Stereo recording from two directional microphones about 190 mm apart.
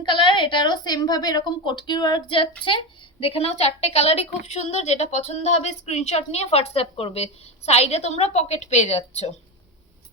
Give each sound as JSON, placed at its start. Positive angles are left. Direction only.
{"t": 0.0, "sound": "a woman's voice", "side_deg": 25}